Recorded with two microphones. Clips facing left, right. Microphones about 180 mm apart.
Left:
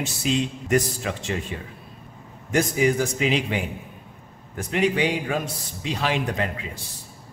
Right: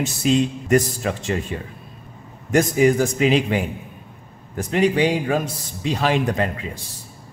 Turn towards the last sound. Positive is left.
turn(degrees=-40)  # may be behind; listen again after turning